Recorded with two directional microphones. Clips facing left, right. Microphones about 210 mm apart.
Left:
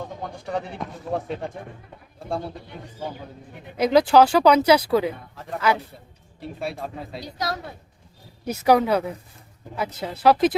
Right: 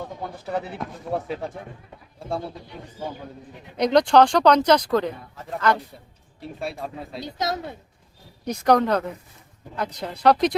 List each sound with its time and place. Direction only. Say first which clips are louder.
0.2 s speech: right 1 dB; 5° right (ahead or behind)
3.8 s speech: left 1 dB; 5° left (ahead or behind)
7.3 s a woman's voice: right 2 dB; 20° right (ahead or behind)
8.4 s speech: left 1 dB; 5° left (ahead or behind)